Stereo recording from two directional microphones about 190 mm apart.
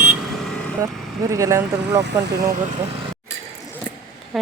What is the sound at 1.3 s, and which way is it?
Speech, 15° right (ahead or behind).